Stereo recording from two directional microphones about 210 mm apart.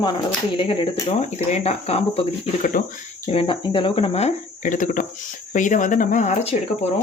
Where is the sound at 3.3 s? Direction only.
25° left (ahead or behind).